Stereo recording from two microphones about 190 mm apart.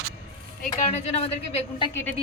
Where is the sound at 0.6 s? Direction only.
35° left (ahead or behind).